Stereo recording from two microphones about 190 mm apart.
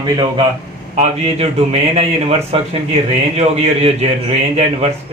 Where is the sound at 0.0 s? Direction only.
25° right (ahead or behind).